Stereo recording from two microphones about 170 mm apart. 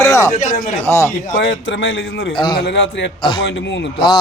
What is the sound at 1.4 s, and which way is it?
Speech, 90° left.